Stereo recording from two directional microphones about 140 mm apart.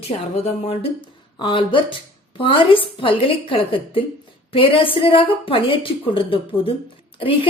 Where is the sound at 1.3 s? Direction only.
35° left (ahead or behind).